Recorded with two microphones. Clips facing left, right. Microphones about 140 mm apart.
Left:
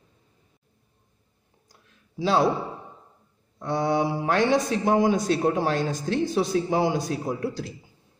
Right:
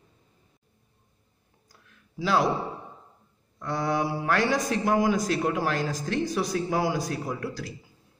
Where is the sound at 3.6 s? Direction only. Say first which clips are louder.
Left 3 dB; 25° left (ahead or behind).